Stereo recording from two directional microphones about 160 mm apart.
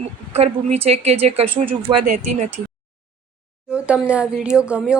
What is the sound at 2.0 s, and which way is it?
Speech, 55° right (ahead or behind).